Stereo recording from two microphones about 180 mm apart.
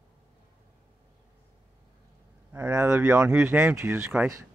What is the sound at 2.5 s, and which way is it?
Speech, 10° right (ahead or behind).